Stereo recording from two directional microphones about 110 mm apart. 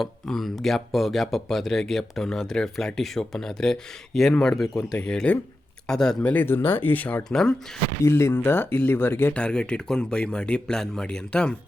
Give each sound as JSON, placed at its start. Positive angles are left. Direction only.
{"t": 0.0, "sound": "speech", "side_deg": 0}
{"t": 7.3, "sound": "speech", "side_deg": 5}
{"t": 8.0, "sound": "speech", "side_deg": 25}